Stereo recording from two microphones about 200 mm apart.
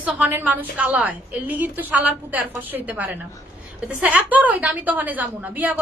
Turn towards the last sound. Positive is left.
turn(degrees=-10)  # may be behind; listen again after turning